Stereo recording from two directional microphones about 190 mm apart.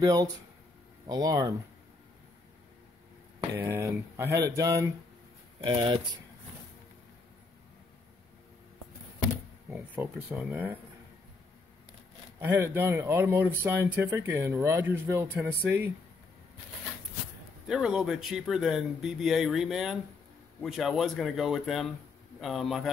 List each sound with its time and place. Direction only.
0.0 s speech: 20° right (ahead or behind)
3.7 s speech: 15° right (ahead or behind)
9.7 s speech: 10° right (ahead or behind)
12.4 s speech: 10° right (ahead or behind)
17.6 s speech: 5° right (ahead or behind)